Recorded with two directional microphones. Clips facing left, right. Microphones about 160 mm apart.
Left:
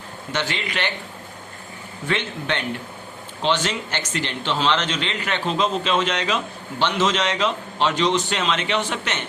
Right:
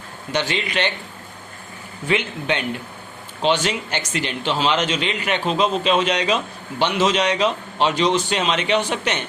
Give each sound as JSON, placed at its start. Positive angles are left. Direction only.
{"t": 0.3, "sound": "a man's voice", "side_deg": -20}
{"t": 2.0, "sound": "speech", "side_deg": -10}